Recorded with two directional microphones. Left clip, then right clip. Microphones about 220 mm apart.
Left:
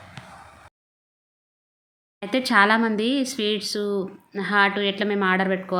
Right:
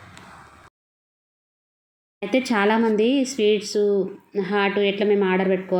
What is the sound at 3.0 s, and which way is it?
Speech, 40° left (ahead or behind).